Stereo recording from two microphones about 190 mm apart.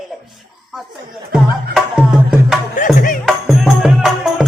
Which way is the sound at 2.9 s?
45° left (ahead or behind).